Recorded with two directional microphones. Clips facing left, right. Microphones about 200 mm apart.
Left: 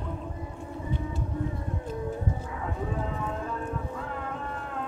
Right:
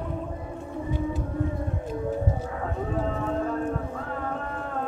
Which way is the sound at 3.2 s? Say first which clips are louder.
Right 6 dB; 35° right (ahead or behind).